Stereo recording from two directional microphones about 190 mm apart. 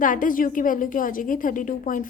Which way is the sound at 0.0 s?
45° left (ahead or behind).